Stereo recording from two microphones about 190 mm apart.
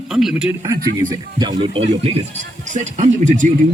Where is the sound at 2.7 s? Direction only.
40° right (ahead or behind).